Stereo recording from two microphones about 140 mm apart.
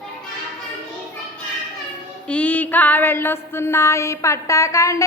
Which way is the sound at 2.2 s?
10° left (ahead or behind).